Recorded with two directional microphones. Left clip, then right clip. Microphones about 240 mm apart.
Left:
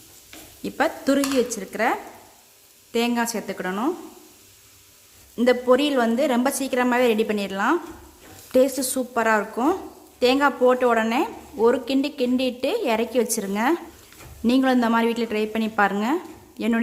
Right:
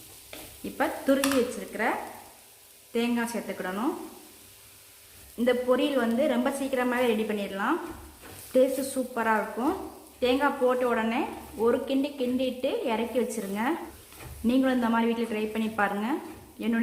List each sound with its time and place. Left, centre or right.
0.6 s a woman's voice: left
5.4 s a woman's voice: left